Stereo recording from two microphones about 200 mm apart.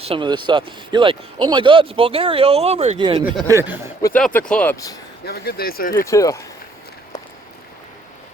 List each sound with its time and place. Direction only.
0.0 s speech: 25° right (ahead or behind)
3.4 s speech: 15° right (ahead or behind)
4.2 s speech: 5° left (ahead or behind)
5.2 s speech: 50° left (ahead or behind)
6.1 s speech: 15° left (ahead or behind)